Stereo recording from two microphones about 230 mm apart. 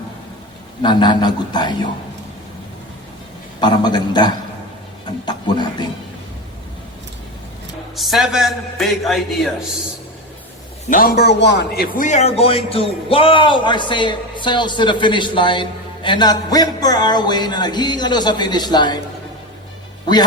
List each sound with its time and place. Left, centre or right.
0.8 s a man's voice: centre
3.6 s a man's voice: centre
7.9 s a man's voice: centre
10.8 s a man's voice: left
16.0 s music: centre